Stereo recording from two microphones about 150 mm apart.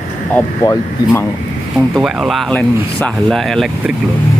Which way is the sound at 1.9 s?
Centre (ahead or behind).